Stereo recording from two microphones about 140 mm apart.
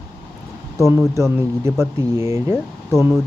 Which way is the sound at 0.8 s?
20° right (ahead or behind).